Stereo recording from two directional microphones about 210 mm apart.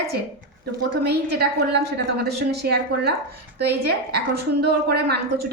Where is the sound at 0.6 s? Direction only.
50° right (ahead or behind).